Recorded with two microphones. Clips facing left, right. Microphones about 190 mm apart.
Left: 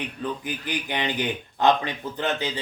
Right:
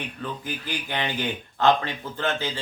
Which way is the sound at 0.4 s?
15° left (ahead or behind).